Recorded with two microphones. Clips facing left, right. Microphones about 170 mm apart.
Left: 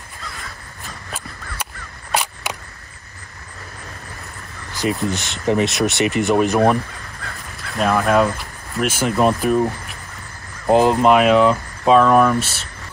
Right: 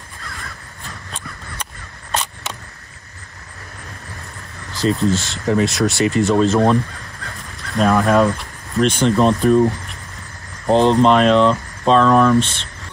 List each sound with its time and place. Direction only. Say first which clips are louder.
4.7 s speech: right 4 dB; 15° left (ahead or behind)
7.5 s speech: right 3 dB; 5° left (ahead or behind)